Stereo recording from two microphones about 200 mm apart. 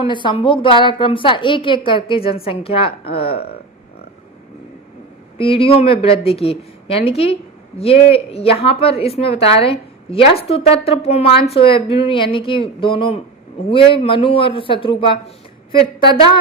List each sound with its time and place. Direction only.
0.0 s a woman's voice: 25° left (ahead or behind)
5.4 s a woman's voice: 30° left (ahead or behind)